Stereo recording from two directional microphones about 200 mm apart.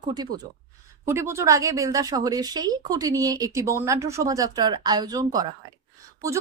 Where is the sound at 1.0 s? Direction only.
15° right (ahead or behind).